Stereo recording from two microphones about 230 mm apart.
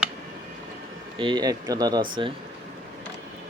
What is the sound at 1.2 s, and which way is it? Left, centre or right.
Speech, centre.